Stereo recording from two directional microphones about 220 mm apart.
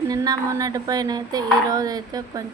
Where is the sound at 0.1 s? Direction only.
15° right (ahead or behind).